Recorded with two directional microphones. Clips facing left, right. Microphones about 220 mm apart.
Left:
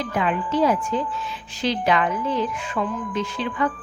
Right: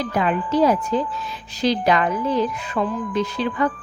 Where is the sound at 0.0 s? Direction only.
40° right (ahead or behind).